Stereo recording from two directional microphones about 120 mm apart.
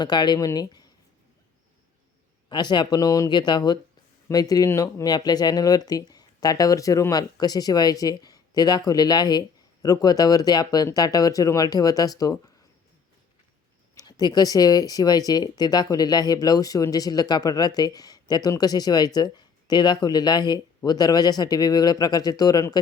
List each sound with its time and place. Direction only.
0.0 s speech: 35° left (ahead or behind)
2.5 s speech: 40° left (ahead or behind)
13.9 s speech: 35° left (ahead or behind)